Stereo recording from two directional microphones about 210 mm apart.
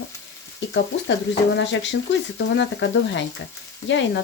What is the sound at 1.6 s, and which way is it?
Speech, 60° left (ahead or behind).